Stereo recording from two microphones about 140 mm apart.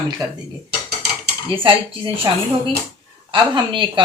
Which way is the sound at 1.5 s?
40° right (ahead or behind).